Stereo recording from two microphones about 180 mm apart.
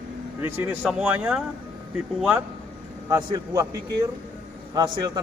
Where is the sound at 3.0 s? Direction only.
20° right (ahead or behind).